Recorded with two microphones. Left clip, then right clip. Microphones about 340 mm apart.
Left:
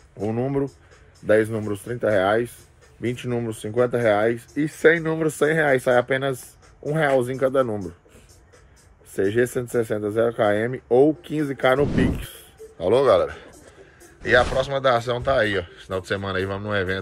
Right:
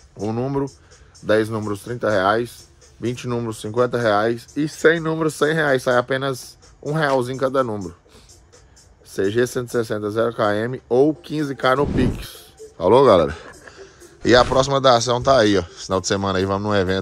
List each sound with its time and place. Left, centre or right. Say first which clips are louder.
0.2 s speech: right 1 dB; centre
9.1 s speech: right 1 dB; centre
12.7 s speech: right 4 dB; right
14.2 s speech: right 4 dB; centre